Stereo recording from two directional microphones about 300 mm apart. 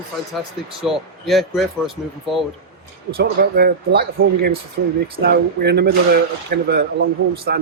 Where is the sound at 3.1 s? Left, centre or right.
Right.